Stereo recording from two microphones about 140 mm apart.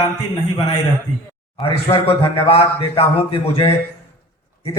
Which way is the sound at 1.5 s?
40° left (ahead or behind).